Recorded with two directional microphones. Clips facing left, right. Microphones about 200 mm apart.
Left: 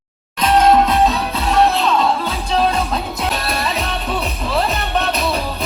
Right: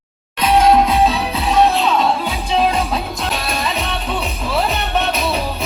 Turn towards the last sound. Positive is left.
turn(degrees=0)  # may be behind; listen again after turning